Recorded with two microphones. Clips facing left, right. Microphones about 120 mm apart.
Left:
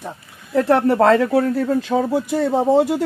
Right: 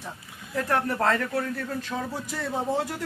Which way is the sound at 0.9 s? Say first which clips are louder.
Left 11 dB; 75° left (ahead or behind).